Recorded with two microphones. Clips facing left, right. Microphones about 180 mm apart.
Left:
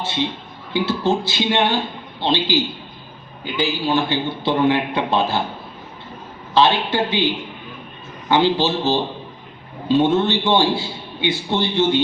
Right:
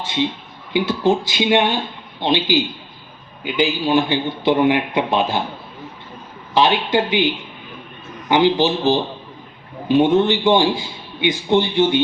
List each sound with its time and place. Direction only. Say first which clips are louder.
0.0 s a man's voice: right 2 dB; 15° right (ahead or behind)
6.5 s a man's voice: right 1 dB; 15° right (ahead or behind)
8.3 s a man's voice: right 2 dB; 15° right (ahead or behind)